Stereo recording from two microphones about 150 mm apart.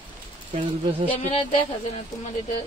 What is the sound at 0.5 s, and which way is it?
Speech, 35° right (ahead or behind).